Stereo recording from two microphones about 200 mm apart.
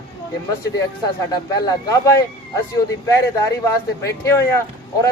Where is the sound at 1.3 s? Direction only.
20° left (ahead or behind).